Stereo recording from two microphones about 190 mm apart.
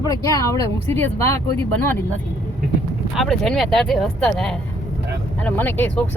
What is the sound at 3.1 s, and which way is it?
Speech, centre (ahead or behind).